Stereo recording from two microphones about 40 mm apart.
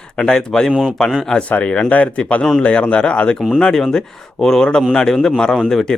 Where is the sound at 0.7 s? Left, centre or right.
Right.